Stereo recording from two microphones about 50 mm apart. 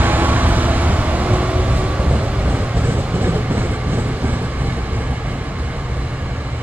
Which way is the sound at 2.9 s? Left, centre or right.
Right.